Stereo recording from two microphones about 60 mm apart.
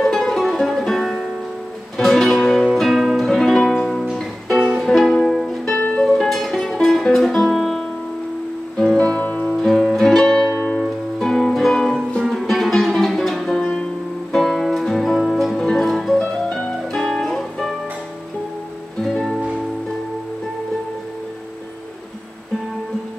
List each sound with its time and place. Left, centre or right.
0.0 s music: centre
4.6 s music: centre
4.8 s music: centre
9.7 s music: centre
19.0 s music: centre